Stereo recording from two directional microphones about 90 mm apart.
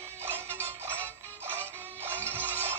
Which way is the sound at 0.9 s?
20° left (ahead or behind).